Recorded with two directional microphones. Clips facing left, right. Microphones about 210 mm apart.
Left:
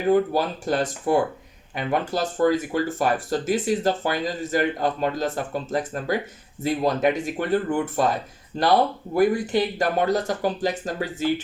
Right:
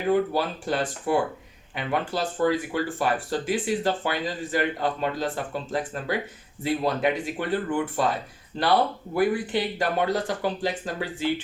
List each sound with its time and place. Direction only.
0.1 s speech: 45° left (ahead or behind)